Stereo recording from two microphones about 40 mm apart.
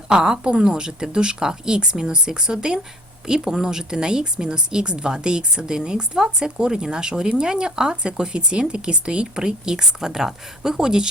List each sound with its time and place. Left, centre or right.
0.1 s speech: centre